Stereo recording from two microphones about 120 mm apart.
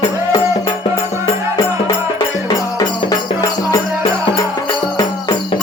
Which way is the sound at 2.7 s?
30° left (ahead or behind).